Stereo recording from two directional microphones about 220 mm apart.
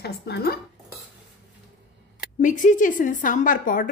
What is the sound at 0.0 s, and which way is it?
Speech, 45° left (ahead or behind).